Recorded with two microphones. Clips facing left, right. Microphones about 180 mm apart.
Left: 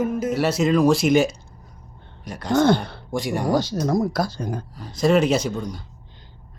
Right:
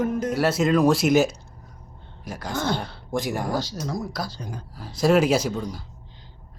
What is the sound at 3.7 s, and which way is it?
Speech, 55° left (ahead or behind).